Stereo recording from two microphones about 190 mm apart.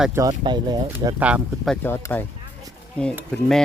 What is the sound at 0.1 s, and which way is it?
Speech, 20° right (ahead or behind).